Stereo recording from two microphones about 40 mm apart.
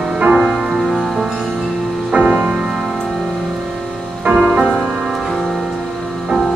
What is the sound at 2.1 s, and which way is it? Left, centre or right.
Music, right.